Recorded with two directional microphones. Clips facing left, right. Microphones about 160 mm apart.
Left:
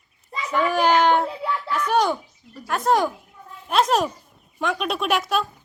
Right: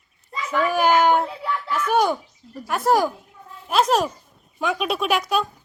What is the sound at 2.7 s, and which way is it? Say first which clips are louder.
A child's voice: right 1 dB; 5° right (ahead or behind).